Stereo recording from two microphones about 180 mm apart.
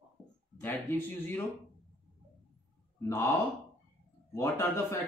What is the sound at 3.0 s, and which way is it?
Speech, 15° left (ahead or behind).